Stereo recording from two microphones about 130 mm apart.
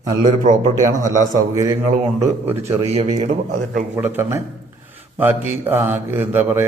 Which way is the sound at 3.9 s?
20° right (ahead or behind).